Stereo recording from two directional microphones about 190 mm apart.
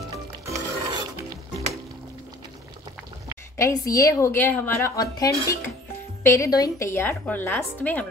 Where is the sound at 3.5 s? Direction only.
15° left (ahead or behind).